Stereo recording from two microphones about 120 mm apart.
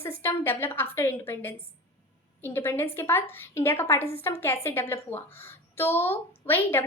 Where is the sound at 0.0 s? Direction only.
20° left (ahead or behind).